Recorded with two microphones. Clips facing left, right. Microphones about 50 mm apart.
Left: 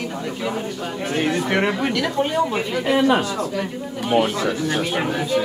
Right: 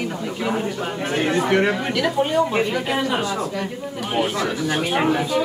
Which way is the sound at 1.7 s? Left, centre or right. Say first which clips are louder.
Even; centre.